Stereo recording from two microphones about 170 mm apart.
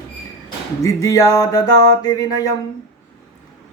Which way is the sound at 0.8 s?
20° left (ahead or behind).